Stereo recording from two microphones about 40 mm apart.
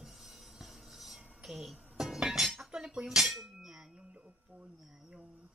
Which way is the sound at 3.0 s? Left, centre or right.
Centre.